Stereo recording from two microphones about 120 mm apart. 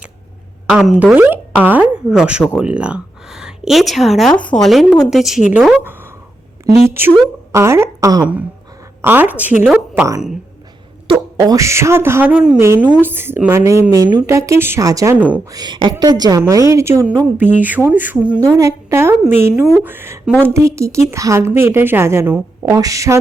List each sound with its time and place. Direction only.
0.7 s speech: 5° right (ahead or behind)
1.1 s a woman's voice: 15° right (ahead or behind)
9.0 s speech: 15° right (ahead or behind)
11.3 s a woman's voice: 30° right (ahead or behind); by 12.5 s 10° right (ahead or behind)
12.5 s a woman's voice: 20° right (ahead or behind)
13.9 s a woman's voice: 30° right (ahead or behind)
15.1 s speech: 10° right (ahead or behind)
15.4 s a woman's voice: 35° right (ahead or behind); by 18.3 s 10° right (ahead or behind)
18.5 s a woman's voice: 25° right (ahead or behind)